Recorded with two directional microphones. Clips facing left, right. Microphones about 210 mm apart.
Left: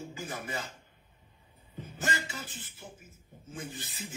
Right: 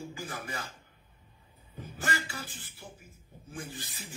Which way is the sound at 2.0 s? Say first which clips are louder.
Even; 20° left (ahead or behind).